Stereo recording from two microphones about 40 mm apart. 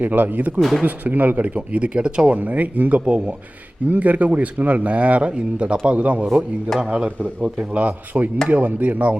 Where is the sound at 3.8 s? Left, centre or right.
Right.